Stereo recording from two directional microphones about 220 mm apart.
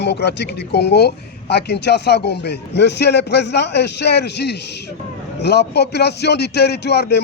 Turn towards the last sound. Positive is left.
turn(degrees=50)  # may be behind; listen again after turning